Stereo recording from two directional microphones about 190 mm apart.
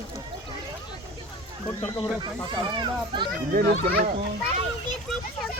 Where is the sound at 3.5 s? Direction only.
50° right (ahead or behind).